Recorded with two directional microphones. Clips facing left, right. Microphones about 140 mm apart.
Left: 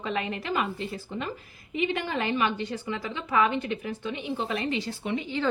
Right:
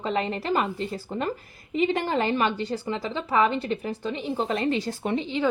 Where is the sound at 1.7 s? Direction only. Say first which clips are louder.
Right 5 dB; 35° right (ahead or behind).